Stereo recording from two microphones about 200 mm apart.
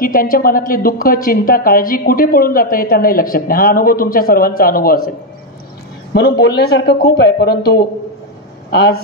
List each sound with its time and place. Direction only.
0.0 s a woman's voice: 45° left (ahead or behind)
6.1 s a woman's voice: 55° left (ahead or behind)